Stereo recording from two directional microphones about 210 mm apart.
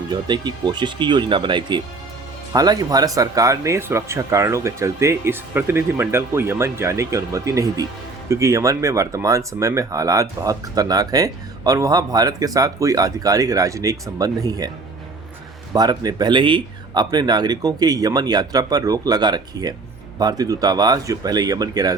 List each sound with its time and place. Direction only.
0.1 s speech: 20° right (ahead or behind)
15.7 s speech: 20° right (ahead or behind)